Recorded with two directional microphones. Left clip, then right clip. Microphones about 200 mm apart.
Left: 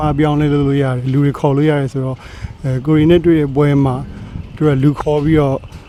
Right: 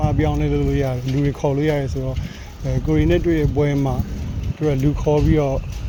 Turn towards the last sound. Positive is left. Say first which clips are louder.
# left 4 dB
turn(degrees=35)  # may be behind; listen again after turning